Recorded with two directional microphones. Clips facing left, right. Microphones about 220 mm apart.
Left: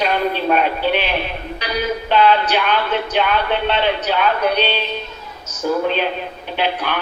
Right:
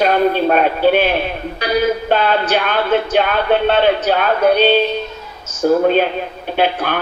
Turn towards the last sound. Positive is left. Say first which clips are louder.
# right 4 dB
turn(degrees=-45)  # may be behind; listen again after turning